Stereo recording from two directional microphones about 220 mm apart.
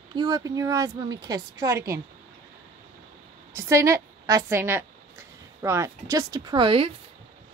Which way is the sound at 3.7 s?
15° right (ahead or behind).